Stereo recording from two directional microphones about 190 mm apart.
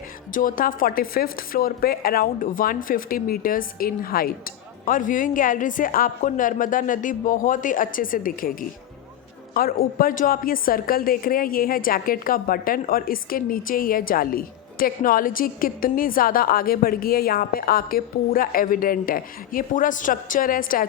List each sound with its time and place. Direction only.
0.3 s a woman's voice: 45° left (ahead or behind)
9.6 s a woman's voice: 50° left (ahead or behind)